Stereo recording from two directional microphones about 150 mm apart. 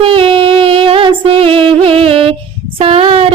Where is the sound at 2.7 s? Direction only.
40° right (ahead or behind).